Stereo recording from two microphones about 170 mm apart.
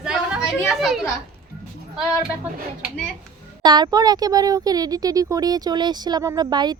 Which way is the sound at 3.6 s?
25° right (ahead or behind).